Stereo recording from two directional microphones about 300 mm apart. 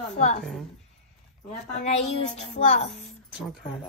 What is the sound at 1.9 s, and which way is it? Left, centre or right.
A child's voice, left.